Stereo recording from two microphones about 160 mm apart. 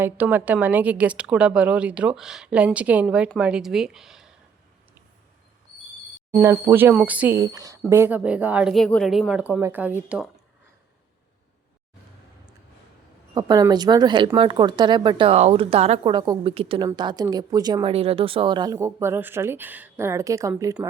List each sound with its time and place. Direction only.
0.0 s a woman's voice: 10° right (ahead or behind)
6.4 s a woman's voice: 15° right (ahead or behind)
7.3 s a woman's voice: 20° right (ahead or behind)
13.3 s a woman's voice: 25° right (ahead or behind)
16.1 s speech: 25° right (ahead or behind)
16.4 s a woman's voice: 35° right (ahead or behind); by 20.5 s 20° right (ahead or behind)